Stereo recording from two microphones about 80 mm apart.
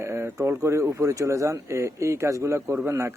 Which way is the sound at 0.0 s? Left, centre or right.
Right.